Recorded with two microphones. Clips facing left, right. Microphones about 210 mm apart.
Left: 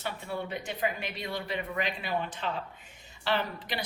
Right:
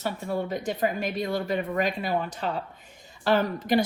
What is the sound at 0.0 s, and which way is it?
Speech, 45° right (ahead or behind).